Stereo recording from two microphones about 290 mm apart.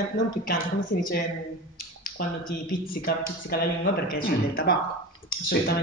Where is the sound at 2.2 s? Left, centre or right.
Left.